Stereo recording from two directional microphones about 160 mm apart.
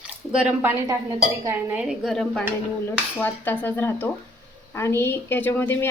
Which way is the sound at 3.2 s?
10° left (ahead or behind).